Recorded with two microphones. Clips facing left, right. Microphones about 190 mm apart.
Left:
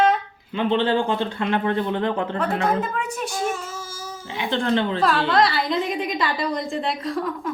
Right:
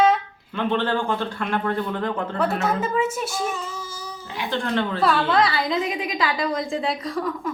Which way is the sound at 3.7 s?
10° left (ahead or behind).